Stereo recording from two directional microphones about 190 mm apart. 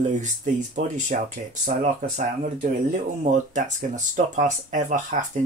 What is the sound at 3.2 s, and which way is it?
Speech, 40° right (ahead or behind).